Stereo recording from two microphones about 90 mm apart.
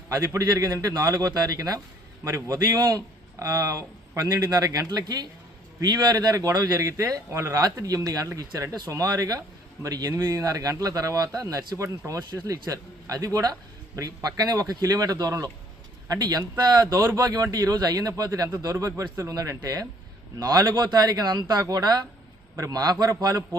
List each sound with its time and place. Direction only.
0.1 s a man's voice: 40° right (ahead or behind)